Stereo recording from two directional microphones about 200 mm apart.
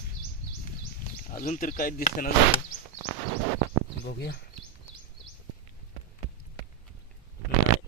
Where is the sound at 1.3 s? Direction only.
45° left (ahead or behind).